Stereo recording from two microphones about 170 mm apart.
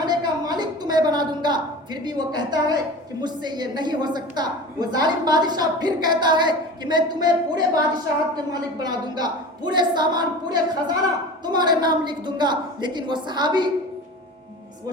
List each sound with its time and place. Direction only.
0.0 s a woman's voice: 25° right (ahead or behind)